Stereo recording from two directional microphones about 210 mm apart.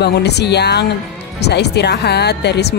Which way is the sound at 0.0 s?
50° left (ahead or behind).